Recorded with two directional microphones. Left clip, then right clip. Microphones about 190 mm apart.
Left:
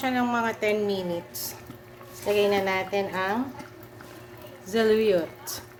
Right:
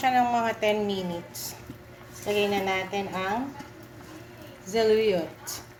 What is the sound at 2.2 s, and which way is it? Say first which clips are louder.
A woman's voice: left 3 dB; 30° left (ahead or behind).